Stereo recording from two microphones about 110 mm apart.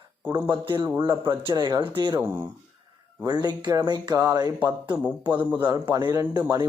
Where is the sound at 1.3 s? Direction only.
45° right (ahead or behind).